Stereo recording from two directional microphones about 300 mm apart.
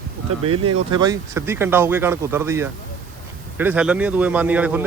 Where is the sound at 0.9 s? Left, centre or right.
Centre.